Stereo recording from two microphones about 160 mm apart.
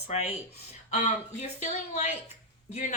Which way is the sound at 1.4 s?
45° left (ahead or behind).